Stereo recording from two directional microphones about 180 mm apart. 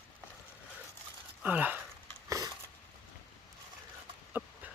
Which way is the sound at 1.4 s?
10° right (ahead or behind).